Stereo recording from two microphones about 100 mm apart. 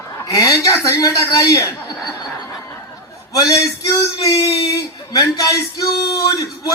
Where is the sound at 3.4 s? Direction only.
35° left (ahead or behind).